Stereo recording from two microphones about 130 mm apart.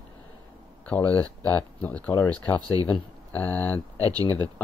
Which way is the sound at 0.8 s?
15° left (ahead or behind).